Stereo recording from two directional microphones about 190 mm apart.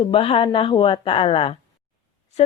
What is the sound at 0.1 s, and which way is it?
Speech, 30° left (ahead or behind).